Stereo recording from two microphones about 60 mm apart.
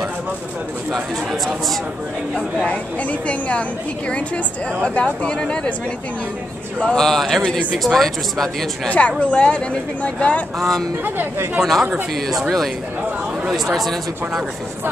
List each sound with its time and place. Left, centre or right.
0.9 s speech: centre
2.5 s speech: left
4.8 s speech: centre
6.8 s speech: centre
7.4 s speech: centre
7.8 s speech: centre
8.8 s speech: left
10.6 s speech: centre
11.1 s speech: right
12.3 s speech: centre